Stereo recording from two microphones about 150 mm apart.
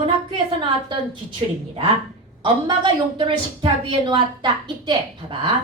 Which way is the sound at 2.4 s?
30° right (ahead or behind).